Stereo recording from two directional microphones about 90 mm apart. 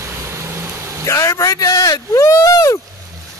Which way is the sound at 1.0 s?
35° left (ahead or behind).